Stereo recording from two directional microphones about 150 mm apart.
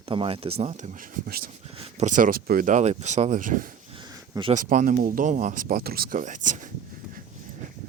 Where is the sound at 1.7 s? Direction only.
45° right (ahead or behind); by 3.7 s 60° right (ahead or behind).